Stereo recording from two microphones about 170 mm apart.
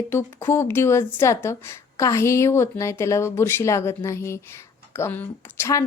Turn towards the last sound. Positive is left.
turn(degrees=15)  # may be behind; listen again after turning